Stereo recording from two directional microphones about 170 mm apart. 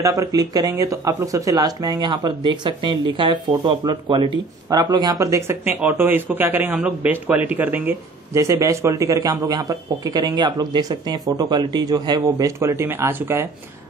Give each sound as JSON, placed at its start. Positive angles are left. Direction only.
{"t": 0.0, "sound": "a man's voice", "side_deg": -20}